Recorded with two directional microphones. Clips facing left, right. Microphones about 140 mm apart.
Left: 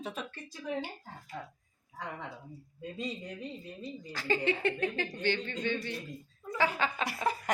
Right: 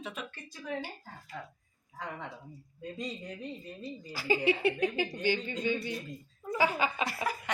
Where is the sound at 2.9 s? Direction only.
Centre (ahead or behind).